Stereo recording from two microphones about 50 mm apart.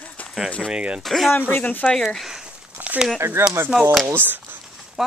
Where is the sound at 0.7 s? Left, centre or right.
Right.